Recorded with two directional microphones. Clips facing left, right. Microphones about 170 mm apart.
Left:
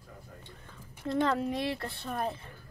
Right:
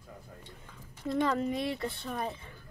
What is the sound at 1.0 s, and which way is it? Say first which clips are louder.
Speech: even; centre (ahead or behind).